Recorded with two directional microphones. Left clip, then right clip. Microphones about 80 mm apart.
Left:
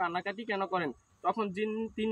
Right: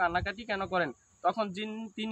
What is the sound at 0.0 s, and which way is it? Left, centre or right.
Speech, right.